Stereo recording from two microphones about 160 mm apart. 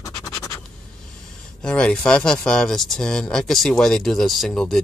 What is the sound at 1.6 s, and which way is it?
Speech, 5° left (ahead or behind).